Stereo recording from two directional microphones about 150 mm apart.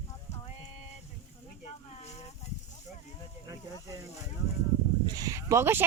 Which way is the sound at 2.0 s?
45° left (ahead or behind).